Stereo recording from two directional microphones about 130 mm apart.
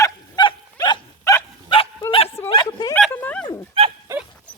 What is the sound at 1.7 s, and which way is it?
Bow-wow, 40° left (ahead or behind).